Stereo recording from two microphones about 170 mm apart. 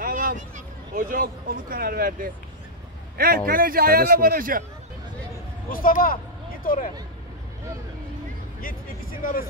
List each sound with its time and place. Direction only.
0.0 s a sound: 55° right (ahead or behind)
0.9 s speech: 55° right (ahead or behind)
3.4 s speech: 60° right (ahead or behind)
5.7 s speech: 55° left (ahead or behind)
8.5 s speech: 55° left (ahead or behind)